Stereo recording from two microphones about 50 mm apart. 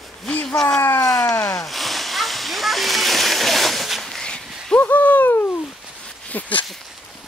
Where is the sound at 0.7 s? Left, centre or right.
Left.